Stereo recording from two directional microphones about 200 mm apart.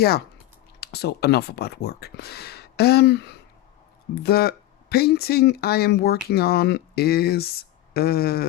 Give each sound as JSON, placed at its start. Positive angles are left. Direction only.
{"t": 0.8, "sound": "speech", "side_deg": 55}